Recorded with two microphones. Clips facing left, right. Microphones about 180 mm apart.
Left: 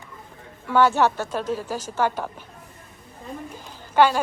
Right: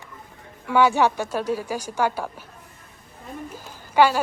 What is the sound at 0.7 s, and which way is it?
A woman's voice, 10° right (ahead or behind).